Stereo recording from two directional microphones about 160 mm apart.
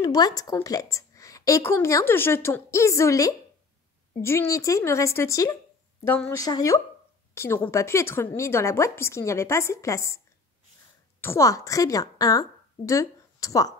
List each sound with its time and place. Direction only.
0.0 s a woman's voice: 25° left (ahead or behind)